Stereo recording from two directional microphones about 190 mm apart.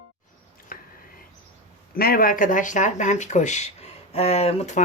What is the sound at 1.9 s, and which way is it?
Speech, 50° left (ahead or behind).